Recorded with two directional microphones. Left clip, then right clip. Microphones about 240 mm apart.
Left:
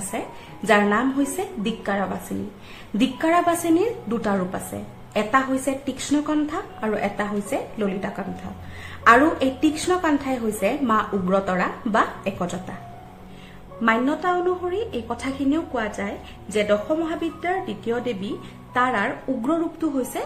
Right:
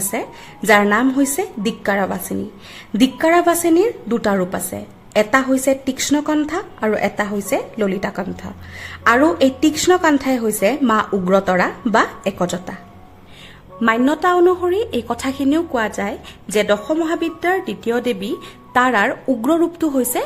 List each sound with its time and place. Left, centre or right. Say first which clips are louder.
0.1 s a woman's voice: right 4 dB; right
13.7 s a woman's voice: right 5 dB; right